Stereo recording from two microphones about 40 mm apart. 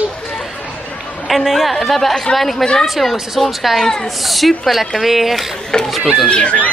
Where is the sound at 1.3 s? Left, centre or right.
Centre.